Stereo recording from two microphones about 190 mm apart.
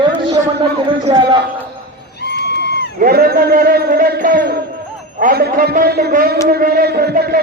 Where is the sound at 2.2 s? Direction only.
60° left (ahead or behind).